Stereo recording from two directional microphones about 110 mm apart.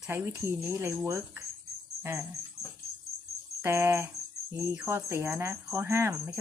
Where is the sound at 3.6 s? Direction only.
25° right (ahead or behind).